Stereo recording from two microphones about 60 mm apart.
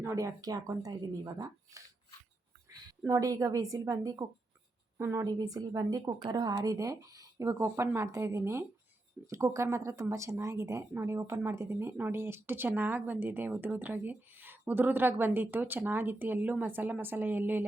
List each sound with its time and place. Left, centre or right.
0.2 s speech: right
3.1 s a woman's voice: right
4.9 s a woman's voice: right
5.2 s a woman's voice: right